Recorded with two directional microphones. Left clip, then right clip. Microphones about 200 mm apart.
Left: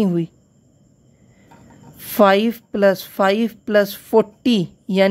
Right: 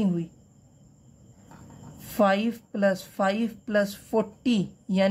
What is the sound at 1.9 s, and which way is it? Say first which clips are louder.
A woman's voice: left 9 dB; 40° left (ahead or behind).